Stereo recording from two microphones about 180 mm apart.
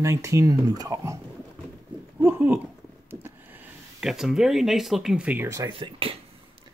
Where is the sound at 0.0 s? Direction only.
15° right (ahead or behind).